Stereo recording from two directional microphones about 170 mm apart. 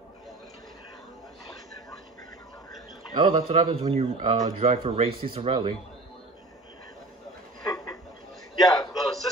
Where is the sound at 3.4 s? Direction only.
35° right (ahead or behind).